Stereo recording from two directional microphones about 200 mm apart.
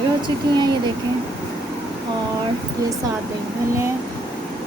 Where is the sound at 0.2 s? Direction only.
20° right (ahead or behind).